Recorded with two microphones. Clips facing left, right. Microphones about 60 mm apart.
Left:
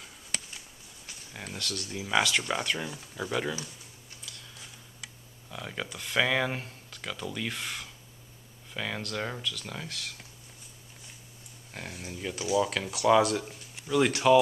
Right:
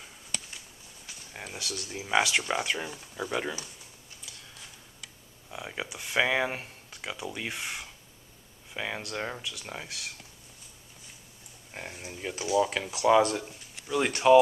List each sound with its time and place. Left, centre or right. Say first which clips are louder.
1.3 s speech: left 1 dB; centre
5.5 s speech: even; centre
11.7 s speech: even; centre